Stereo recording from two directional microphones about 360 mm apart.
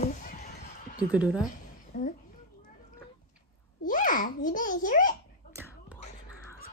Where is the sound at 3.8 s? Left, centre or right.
Left.